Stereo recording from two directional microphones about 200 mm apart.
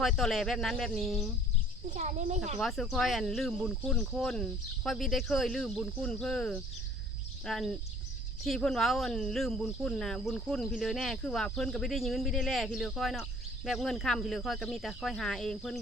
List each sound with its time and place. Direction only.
0.0 s speech: centre (ahead or behind)
1.9 s a child's voice: 35° right (ahead or behind)
2.6 s speech: centre (ahead or behind)